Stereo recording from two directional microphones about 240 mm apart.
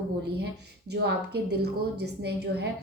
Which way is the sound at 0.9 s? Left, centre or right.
Right.